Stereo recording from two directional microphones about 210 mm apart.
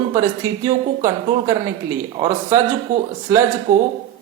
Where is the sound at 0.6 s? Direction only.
15° right (ahead or behind).